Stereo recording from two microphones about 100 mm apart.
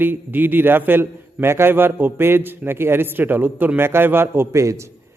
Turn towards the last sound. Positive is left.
turn(degrees=-30)  # may be behind; listen again after turning